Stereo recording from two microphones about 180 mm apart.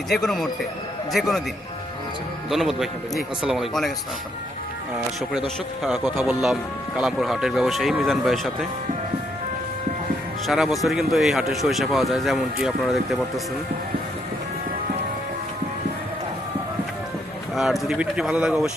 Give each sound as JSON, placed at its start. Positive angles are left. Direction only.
{"t": 0.1, "sound": "speech", "side_deg": 0}
{"t": 2.5, "sound": "speech", "side_deg": 0}
{"t": 5.8, "sound": "speech", "side_deg": 0}
{"t": 10.4, "sound": "speech", "side_deg": 0}
{"t": 17.5, "sound": "speech", "side_deg": 0}